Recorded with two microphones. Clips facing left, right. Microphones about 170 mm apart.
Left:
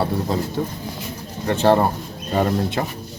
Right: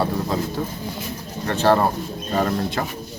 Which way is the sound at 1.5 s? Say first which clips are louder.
Left 1 dB; 15° left (ahead or behind).